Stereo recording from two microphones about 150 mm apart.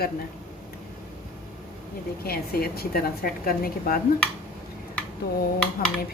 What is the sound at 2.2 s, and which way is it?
A woman's voice, 90° left.